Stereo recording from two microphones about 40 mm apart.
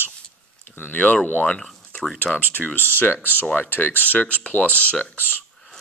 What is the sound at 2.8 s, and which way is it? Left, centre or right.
Speech, left.